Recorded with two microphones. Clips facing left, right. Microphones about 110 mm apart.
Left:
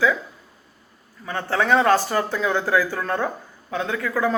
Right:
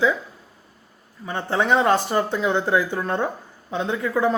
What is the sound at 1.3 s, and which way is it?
Speech, 20° right (ahead or behind).